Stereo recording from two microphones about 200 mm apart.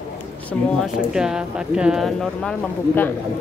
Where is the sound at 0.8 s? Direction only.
5° right (ahead or behind).